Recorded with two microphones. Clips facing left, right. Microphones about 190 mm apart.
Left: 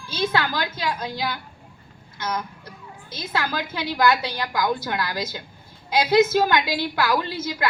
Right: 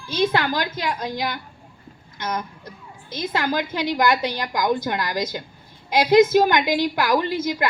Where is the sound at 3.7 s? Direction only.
15° right (ahead or behind).